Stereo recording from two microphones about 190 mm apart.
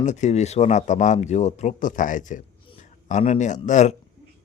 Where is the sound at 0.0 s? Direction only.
40° left (ahead or behind).